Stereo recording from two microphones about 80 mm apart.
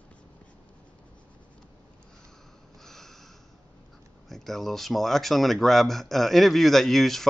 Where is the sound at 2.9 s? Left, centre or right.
Centre.